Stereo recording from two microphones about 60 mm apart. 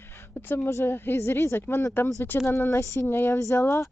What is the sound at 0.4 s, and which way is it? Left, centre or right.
A woman's voice, left.